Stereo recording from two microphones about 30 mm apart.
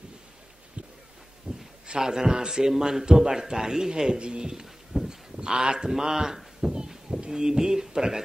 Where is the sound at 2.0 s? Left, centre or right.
Right.